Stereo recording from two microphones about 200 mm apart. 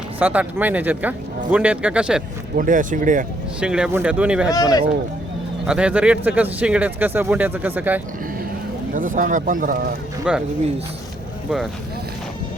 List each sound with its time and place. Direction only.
0.2 s speech: 10° right (ahead or behind)
2.6 s speech: 40° right (ahead or behind)
3.6 s speech: 5° right (ahead or behind)
4.4 s speech: 20° left (ahead or behind)
5.6 s speech: 5° right (ahead or behind)
8.9 s speech: 40° right (ahead or behind)
10.3 s speech: 5° right (ahead or behind)